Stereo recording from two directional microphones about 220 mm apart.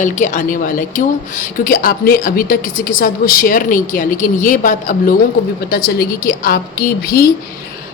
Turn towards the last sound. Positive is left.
turn(degrees=40)  # may be behind; listen again after turning